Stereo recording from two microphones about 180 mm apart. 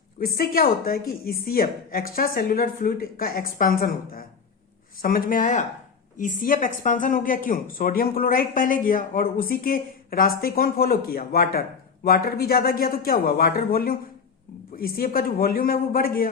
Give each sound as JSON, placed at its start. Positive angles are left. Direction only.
{"t": 0.2, "sound": "speech", "side_deg": 55}